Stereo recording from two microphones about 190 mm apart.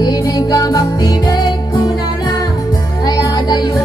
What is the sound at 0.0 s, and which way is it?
Music, 20° left (ahead or behind).